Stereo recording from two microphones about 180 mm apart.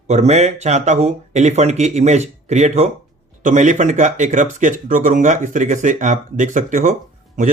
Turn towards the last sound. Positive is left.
turn(degrees=-45)  # may be behind; listen again after turning